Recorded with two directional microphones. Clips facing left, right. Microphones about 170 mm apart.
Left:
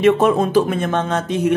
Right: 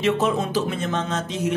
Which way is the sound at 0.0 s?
55° left (ahead or behind).